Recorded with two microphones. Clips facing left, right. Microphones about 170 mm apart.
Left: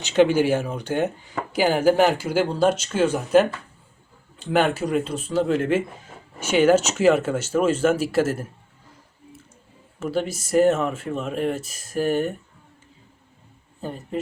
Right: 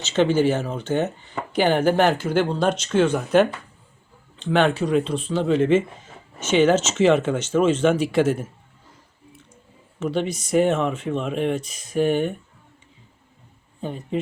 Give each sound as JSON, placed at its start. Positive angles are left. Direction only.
{"t": 0.0, "sound": "speech", "side_deg": 10}
{"t": 10.0, "sound": "speech", "side_deg": 5}